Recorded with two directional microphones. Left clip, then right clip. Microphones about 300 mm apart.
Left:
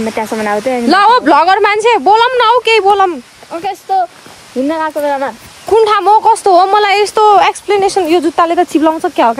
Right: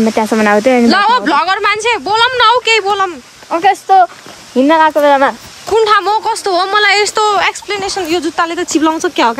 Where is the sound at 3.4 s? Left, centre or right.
Right.